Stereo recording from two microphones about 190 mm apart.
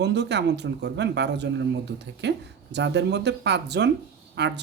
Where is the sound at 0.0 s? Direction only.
65° right (ahead or behind).